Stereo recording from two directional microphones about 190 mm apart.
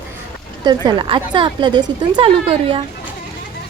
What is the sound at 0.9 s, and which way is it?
A woman's voice, 25° right (ahead or behind).